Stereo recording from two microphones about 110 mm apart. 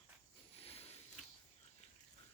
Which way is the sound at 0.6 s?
65° left (ahead or behind).